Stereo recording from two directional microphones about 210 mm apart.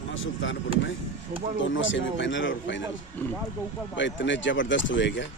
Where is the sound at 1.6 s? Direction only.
65° left (ahead or behind).